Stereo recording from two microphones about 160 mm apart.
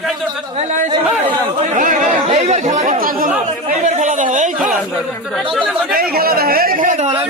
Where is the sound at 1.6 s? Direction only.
55° right (ahead or behind).